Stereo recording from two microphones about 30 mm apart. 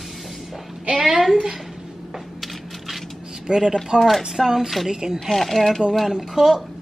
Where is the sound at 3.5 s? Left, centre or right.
Right.